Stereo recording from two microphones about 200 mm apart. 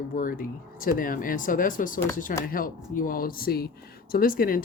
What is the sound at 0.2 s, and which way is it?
Speech, 45° left (ahead or behind).